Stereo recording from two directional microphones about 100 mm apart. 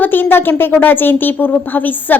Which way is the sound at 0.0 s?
20° left (ahead or behind).